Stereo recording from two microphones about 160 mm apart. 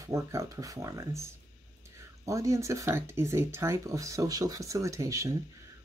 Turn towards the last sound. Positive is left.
turn(degrees=-20)  # may be behind; listen again after turning